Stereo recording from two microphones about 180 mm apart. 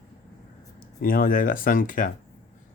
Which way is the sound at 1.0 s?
55° left (ahead or behind).